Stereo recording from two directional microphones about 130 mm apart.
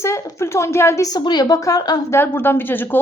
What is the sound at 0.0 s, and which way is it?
A woman's voice, 20° left (ahead or behind).